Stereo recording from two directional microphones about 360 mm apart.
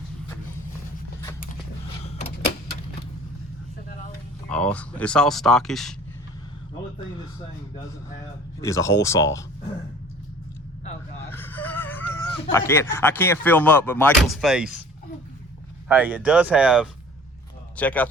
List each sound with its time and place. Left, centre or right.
2.0 s a sound: centre
4.4 s speech: centre
8.6 s speech: centre
11.2 s speech: centre
15.9 s speech: centre